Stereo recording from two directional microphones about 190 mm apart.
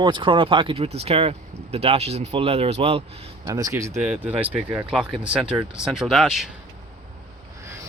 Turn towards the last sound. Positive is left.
turn(degrees=0)  # may be behind; listen again after turning